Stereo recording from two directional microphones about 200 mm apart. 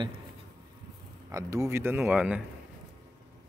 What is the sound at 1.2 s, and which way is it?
Speech, 15° right (ahead or behind).